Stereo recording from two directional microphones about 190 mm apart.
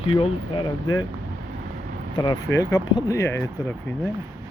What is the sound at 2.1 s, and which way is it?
Speech, 25° left (ahead or behind).